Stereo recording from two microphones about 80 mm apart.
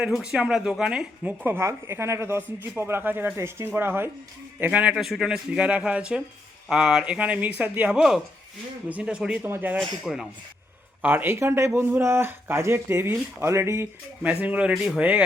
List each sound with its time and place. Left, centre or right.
0.0 s speech: centre
1.5 s speech: right
4.6 s speech: centre
4.9 s speech: centre
9.5 s speech: right
10.1 s speech: centre
11.0 s speech: right
11.3 s speech: right
14.2 s speech: centre